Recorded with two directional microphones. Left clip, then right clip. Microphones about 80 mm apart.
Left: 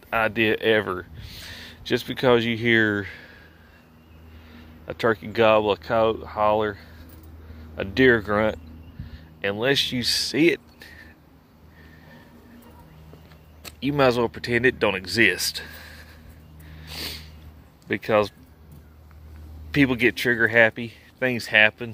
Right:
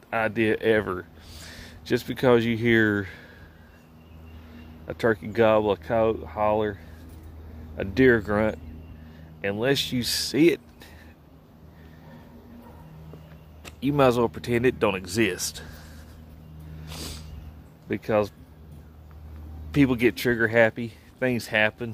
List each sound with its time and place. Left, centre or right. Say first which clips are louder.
0.1 s speech: left 3 dB; centre
1.2 s speech: left 4 dB; right
4.8 s speech: left 1 dB; right
9.7 s speech: left 4 dB; right
10.8 s a sound: left 4 dB; right
13.7 s speech: left 1 dB; right
15.2 s speech: left 7 dB; centre
17.0 s a sound: left 7 dB; centre
17.8 s speech: left 3 dB; centre
19.7 s speech: left 2 dB; right